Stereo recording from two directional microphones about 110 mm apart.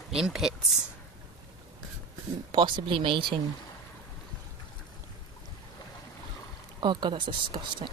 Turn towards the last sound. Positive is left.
turn(degrees=-45)  # may be behind; listen again after turning